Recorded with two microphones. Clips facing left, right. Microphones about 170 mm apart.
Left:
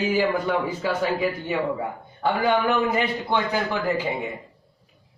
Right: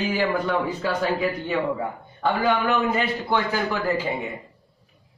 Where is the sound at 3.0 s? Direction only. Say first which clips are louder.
Even; 15° left (ahead or behind).